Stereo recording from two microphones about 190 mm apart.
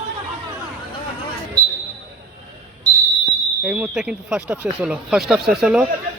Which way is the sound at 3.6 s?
5° right (ahead or behind).